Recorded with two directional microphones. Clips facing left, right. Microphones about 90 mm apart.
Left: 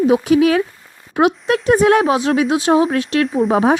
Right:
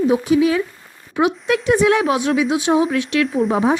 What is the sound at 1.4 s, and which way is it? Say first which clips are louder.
Speech: left 1 dB; 40° left (ahead or behind).